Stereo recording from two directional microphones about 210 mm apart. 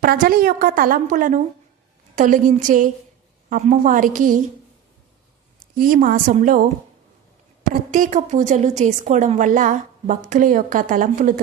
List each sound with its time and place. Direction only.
0.0 s a woman's voice: 45° right (ahead or behind)
5.7 s a woman's voice: 45° right (ahead or behind)
7.7 s a woman's voice: 40° right (ahead or behind)